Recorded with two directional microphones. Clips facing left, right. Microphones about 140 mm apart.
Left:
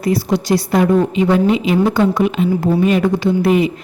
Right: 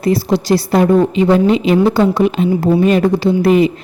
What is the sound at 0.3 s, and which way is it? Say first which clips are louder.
A woman's voice: right 2 dB; 35° right (ahead or behind).